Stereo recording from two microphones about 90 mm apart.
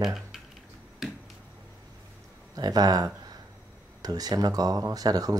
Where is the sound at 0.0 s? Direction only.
5° right (ahead or behind).